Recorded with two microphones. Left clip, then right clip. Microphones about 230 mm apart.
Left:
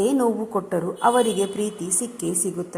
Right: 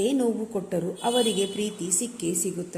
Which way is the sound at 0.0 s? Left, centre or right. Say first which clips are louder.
Left 4 dB; centre.